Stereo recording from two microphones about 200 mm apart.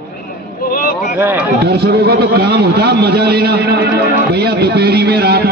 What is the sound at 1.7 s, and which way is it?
A man's voice, 55° right (ahead or behind).